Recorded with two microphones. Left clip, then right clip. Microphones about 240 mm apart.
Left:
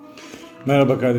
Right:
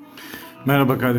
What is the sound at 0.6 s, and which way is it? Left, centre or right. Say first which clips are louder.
Speech: left 2 dB; right.